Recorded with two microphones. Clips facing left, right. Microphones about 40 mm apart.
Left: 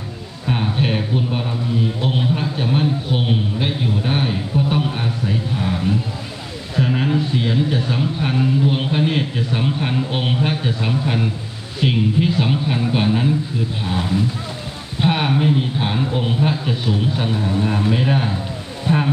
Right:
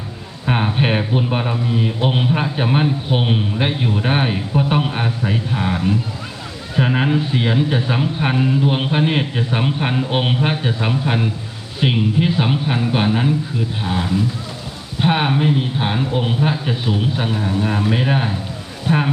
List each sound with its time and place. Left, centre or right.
0.4 s a man's voice: right
15.0 s speech: centre
17.2 s a man's voice: right